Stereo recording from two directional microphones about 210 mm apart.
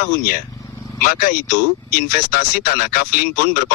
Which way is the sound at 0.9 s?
40° left (ahead or behind).